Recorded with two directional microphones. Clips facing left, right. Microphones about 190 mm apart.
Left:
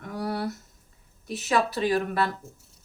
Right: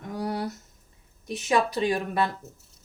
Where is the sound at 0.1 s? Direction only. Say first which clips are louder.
Even; 20° right (ahead or behind).